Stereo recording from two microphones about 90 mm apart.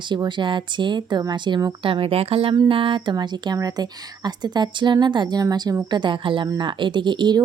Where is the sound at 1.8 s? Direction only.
85° right.